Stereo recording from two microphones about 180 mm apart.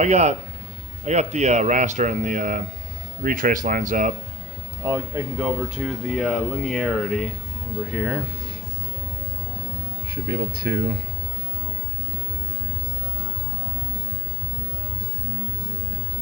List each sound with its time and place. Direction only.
0.0 s speech: 40° right (ahead or behind)
4.8 s speech: 15° right (ahead or behind)
10.0 s speech: 60° right (ahead or behind)